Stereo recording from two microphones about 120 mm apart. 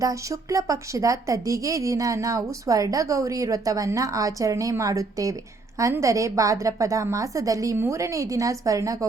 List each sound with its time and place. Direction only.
0.0 s a woman's voice: 25° right (ahead or behind)